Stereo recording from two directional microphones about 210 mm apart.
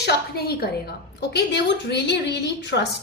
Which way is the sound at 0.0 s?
50° left (ahead or behind).